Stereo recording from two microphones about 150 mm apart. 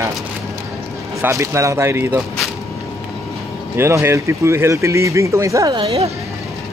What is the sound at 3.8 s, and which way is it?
Speech, 15° right (ahead or behind).